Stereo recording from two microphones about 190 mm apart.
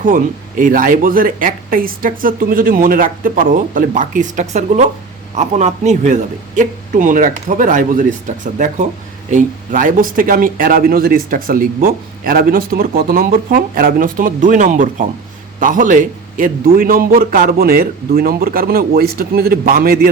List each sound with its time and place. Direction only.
0.0 s speech: 45° right (ahead or behind)